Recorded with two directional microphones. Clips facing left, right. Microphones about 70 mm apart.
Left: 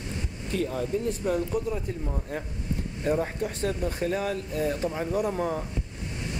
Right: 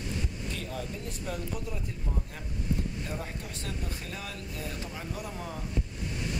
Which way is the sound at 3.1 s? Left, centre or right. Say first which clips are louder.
Left 11 dB; left.